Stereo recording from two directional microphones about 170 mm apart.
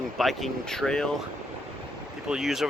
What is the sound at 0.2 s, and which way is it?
Speech, centre (ahead or behind).